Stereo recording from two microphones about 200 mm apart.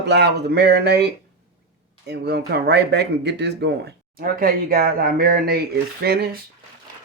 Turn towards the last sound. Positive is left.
turn(degrees=-50)  # may be behind; listen again after turning